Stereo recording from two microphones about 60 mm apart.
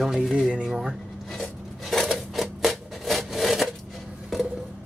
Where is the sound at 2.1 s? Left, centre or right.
Centre.